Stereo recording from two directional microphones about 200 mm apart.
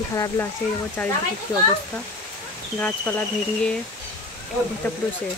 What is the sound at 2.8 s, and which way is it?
Speech, 10° left (ahead or behind).